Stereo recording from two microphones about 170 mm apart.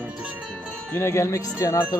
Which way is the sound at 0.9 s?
15° left (ahead or behind).